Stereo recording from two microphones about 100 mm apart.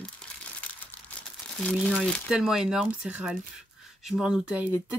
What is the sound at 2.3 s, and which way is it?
Speech, 5° right (ahead or behind).